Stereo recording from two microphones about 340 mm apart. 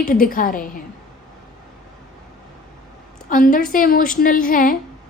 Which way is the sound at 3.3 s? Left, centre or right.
Left.